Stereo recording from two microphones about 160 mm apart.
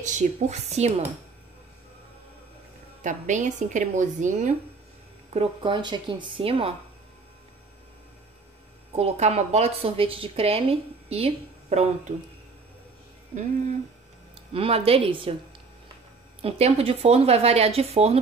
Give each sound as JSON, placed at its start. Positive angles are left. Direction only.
{"t": 0.0, "sound": "speech", "side_deg": -45}
{"t": 3.0, "sound": "speech", "side_deg": -50}
{"t": 5.3, "sound": "a woman's voice", "side_deg": -35}
{"t": 8.9, "sound": "a woman's voice", "side_deg": -45}
{"t": 14.3, "sound": "speech", "side_deg": -40}
{"t": 16.3, "sound": "a woman's voice", "side_deg": -40}